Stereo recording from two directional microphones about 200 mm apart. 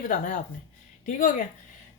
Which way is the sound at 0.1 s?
40° left (ahead or behind).